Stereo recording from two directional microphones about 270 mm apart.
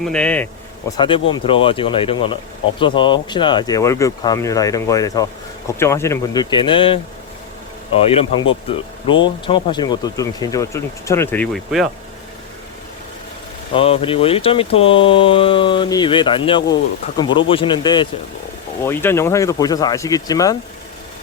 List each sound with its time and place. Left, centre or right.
0.0 s speech: centre
0.9 s speech: centre
13.7 s speech: left